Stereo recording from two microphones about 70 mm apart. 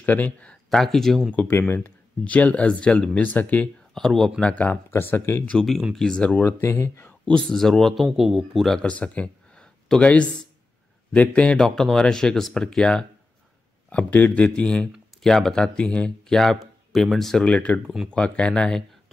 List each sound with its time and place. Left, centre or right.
0.0 s speech: left; by 1.2 s centre
1.5 s speech: left
1.8 s speech: left
3.9 s speech: centre
4.4 s speech: centre
4.9 s speech: left
5.9 s speech: centre
6.4 s speech: left
7.1 s a man's voice: centre
8.8 s speech: centre
11.5 s speech: centre
17.5 s speech: centre